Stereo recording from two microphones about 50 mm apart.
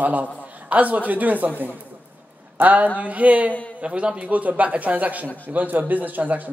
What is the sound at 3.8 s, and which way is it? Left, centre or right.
A man's voice, right.